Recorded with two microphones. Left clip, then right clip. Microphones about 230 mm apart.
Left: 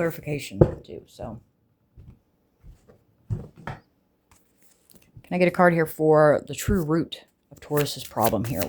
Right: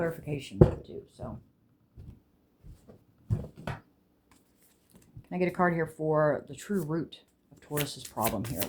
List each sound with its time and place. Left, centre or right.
0.0 s speech: left
4.9 s speech: left
8.2 s speech: left